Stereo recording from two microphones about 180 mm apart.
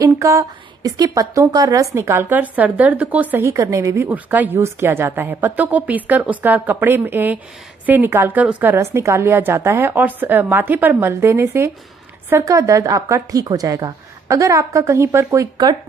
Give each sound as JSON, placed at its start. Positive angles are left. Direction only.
{"t": 0.0, "sound": "a woman's voice", "side_deg": -20}